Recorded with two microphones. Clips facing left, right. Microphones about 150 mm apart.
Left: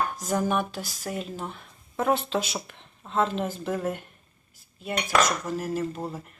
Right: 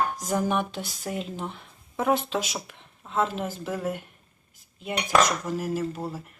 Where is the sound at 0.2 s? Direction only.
15° right (ahead or behind).